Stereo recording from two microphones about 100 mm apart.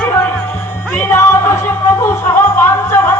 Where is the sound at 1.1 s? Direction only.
30° left (ahead or behind).